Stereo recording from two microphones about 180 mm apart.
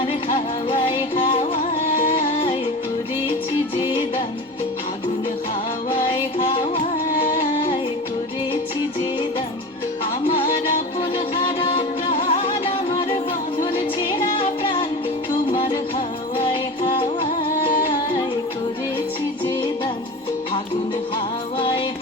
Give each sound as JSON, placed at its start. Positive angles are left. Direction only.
{"t": 0.0, "sound": "music", "side_deg": 30}
{"t": 7.1, "sound": "music", "side_deg": 50}
{"t": 11.3, "sound": "music", "side_deg": 30}
{"t": 14.6, "sound": "music", "side_deg": 25}